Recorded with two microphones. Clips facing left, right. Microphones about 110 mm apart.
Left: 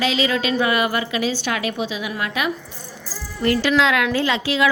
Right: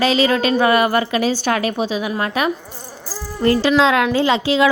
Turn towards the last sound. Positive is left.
turn(degrees=-30)  # may be behind; listen again after turning